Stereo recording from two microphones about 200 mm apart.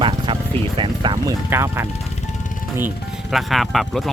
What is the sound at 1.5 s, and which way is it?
Speech, 10° right (ahead or behind).